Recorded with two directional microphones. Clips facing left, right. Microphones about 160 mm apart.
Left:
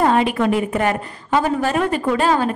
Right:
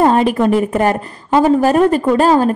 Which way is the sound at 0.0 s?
40° right (ahead or behind).